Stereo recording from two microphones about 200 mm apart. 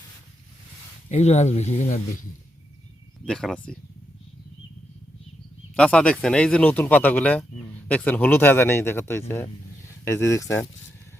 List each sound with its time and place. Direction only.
1.1 s speech: 35° left (ahead or behind)
3.2 s speech: 5° left (ahead or behind)
5.7 s speech: 5° left (ahead or behind)